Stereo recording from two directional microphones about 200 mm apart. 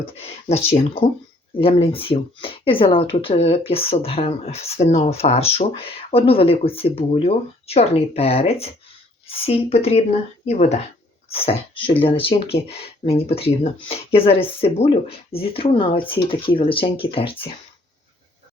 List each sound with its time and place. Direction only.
0.0 s speech: 30° left (ahead or behind)